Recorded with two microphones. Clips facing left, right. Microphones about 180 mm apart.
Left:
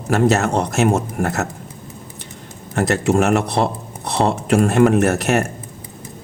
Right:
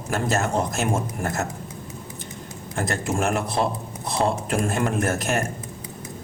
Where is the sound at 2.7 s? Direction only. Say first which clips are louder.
Left 9 dB; 70° left (ahead or behind).